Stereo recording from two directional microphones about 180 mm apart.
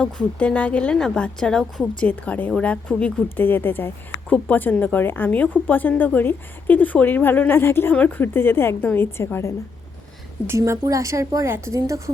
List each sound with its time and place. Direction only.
0.0 s a woman's voice: 5° left (ahead or behind)
10.4 s speech: 15° right (ahead or behind)